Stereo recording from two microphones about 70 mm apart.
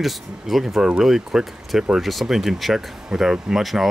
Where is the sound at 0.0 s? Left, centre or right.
Centre.